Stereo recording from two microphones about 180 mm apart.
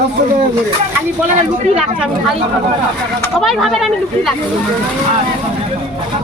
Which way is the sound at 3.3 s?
Centre (ahead or behind).